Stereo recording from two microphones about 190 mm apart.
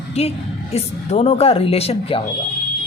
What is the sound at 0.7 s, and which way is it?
A woman's voice, 35° left (ahead or behind).